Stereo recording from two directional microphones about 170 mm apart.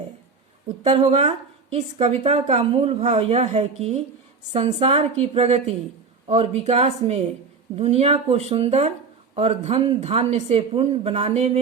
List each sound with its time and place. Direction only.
0.9 s a woman's voice: 40° right (ahead or behind)